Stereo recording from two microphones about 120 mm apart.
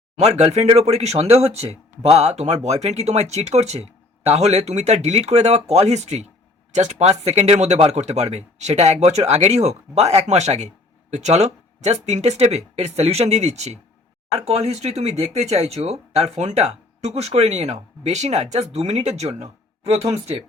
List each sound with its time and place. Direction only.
0.2 s speech: 65° right (ahead or behind)